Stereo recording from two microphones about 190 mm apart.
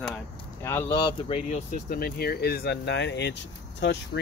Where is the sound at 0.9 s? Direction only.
30° left (ahead or behind); by 4.2 s 65° left (ahead or behind).